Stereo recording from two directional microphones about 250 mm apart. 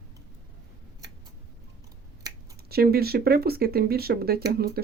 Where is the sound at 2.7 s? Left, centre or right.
Right.